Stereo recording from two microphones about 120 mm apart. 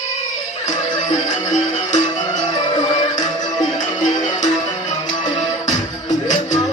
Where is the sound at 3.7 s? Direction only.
90° left.